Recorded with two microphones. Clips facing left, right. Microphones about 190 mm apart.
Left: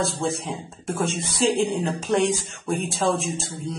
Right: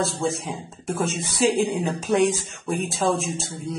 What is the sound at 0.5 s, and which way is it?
Speech, 5° right (ahead or behind).